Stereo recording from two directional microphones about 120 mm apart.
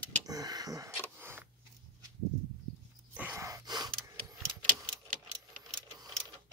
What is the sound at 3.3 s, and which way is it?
Gasp, 25° right (ahead or behind).